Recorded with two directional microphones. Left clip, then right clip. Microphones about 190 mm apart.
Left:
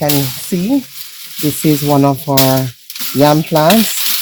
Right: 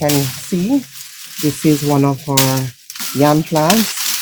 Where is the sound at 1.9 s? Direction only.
40° left (ahead or behind).